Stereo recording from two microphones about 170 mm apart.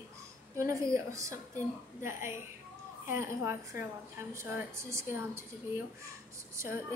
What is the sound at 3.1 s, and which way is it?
A woman's voice, 15° right (ahead or behind).